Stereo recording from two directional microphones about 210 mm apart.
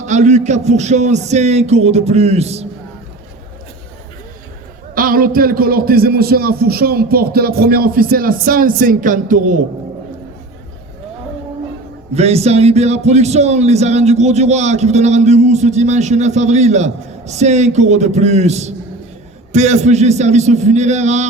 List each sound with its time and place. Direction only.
0.0 s speech: 35° right (ahead or behind)
4.9 s a man's voice: 40° right (ahead or behind)
12.1 s speech: 30° right (ahead or behind)